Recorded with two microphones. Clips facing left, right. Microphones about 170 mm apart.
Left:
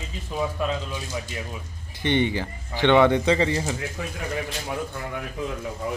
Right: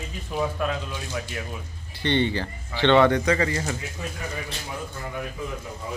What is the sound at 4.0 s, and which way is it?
Speech, 75° left (ahead or behind).